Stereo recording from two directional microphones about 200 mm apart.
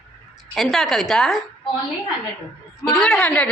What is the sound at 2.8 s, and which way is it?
Speech, 5° left (ahead or behind).